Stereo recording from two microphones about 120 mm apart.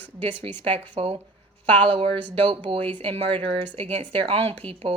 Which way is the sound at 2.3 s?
50° right (ahead or behind).